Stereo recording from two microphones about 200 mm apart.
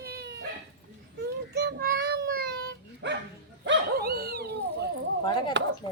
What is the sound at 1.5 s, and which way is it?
Child singing, 55° right (ahead or behind).